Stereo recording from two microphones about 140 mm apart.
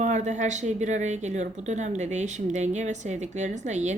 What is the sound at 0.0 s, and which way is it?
Speech, 60° right (ahead or behind).